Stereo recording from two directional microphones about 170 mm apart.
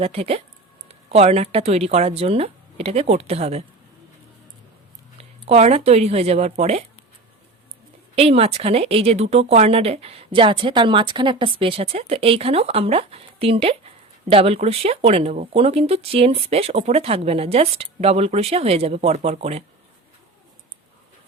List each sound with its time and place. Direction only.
0.0 s a woman's voice: 35° right (ahead or behind)
5.5 s a woman's voice: 40° right (ahead or behind)
8.1 s a woman's voice: 35° right (ahead or behind)